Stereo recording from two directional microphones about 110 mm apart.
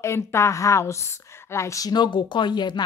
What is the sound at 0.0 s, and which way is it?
Speech, 25° left (ahead or behind).